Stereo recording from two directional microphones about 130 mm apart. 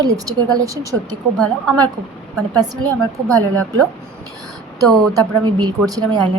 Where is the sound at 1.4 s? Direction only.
Centre (ahead or behind).